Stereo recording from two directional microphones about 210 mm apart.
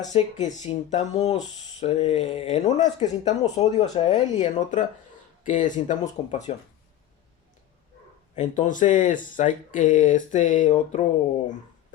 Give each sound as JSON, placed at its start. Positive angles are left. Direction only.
{"t": 0.1, "sound": "speech", "side_deg": 35}
{"t": 8.4, "sound": "speech", "side_deg": 35}